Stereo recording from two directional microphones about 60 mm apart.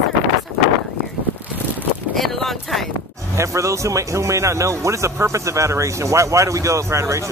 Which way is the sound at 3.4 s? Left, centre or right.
Right.